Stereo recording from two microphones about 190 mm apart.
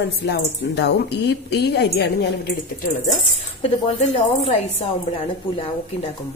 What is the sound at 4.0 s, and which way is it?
Speech, 35° left (ahead or behind).